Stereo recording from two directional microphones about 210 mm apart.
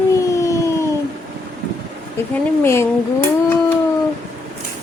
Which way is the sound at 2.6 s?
10° left (ahead or behind).